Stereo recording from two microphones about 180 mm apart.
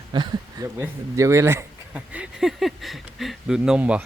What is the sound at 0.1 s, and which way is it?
Speech, 25° right (ahead or behind).